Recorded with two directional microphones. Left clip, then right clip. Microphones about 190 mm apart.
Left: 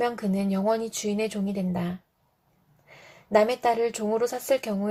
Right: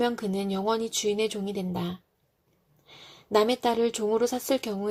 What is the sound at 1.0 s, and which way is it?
Speech, 45° right (ahead or behind).